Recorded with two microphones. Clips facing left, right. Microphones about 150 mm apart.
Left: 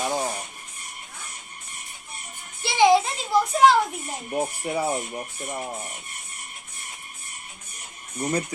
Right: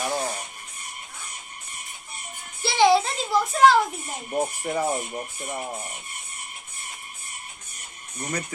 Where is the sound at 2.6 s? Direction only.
15° left (ahead or behind).